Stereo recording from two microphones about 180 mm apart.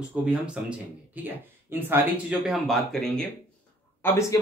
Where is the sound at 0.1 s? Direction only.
5° right (ahead or behind).